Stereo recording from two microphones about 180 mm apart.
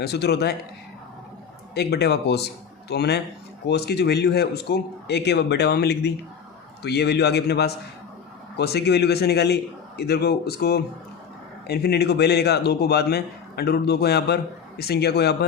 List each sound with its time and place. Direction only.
0.0 s a man's voice: 65° left (ahead or behind)
1.7 s a man's voice: 65° left (ahead or behind)